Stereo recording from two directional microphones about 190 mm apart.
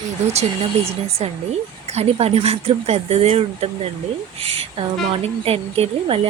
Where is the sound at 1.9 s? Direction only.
30° right (ahead or behind).